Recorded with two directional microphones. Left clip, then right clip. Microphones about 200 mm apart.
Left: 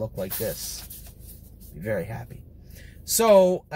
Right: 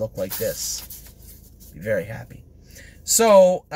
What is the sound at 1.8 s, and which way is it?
Speech, 15° right (ahead or behind).